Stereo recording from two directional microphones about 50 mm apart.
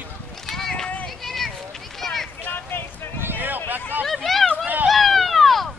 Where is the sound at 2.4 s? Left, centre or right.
Left.